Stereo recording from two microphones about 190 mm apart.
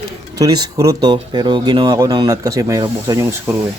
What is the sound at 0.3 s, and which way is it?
Speech, 20° right (ahead or behind).